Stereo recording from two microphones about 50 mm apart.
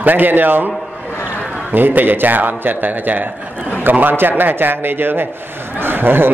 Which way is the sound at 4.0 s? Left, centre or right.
Right.